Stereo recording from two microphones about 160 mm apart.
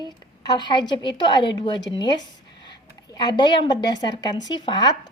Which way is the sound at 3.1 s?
25° left (ahead or behind).